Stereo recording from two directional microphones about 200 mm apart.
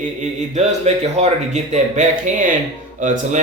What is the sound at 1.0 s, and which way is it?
A man's voice, 35° right (ahead or behind).